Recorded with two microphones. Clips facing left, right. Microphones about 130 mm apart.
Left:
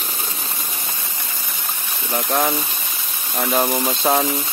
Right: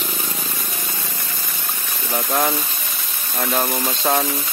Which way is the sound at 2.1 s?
5° left (ahead or behind).